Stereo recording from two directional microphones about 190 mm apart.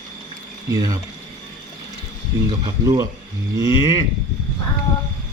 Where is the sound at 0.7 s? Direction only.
20° right (ahead or behind).